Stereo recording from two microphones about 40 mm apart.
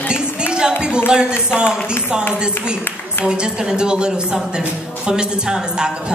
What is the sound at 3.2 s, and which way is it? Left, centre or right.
A man's voice, right.